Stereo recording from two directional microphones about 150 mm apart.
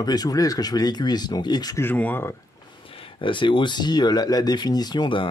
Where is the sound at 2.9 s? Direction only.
35° left (ahead or behind).